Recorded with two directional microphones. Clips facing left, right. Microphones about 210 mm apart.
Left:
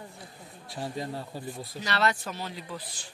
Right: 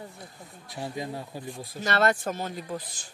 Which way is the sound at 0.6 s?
15° right (ahead or behind).